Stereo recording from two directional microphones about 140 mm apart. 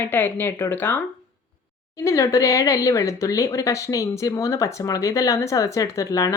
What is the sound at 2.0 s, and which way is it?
Speech, 20° left (ahead or behind).